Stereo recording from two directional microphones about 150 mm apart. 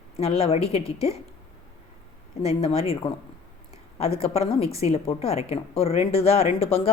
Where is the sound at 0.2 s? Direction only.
40° left (ahead or behind).